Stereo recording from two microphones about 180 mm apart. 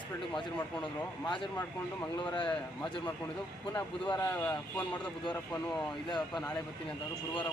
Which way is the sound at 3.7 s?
10° left (ahead or behind).